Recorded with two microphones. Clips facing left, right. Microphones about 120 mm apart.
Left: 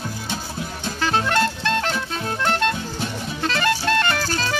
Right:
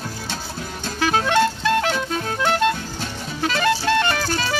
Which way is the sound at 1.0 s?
10° right (ahead or behind).